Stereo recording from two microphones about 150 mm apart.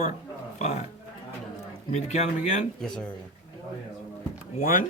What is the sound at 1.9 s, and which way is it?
Speech, 50° left (ahead or behind).